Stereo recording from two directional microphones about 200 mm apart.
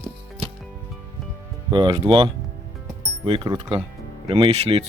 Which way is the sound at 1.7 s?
25° right (ahead or behind).